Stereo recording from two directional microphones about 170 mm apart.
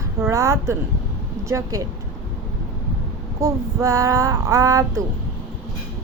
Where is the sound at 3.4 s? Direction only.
20° right (ahead or behind).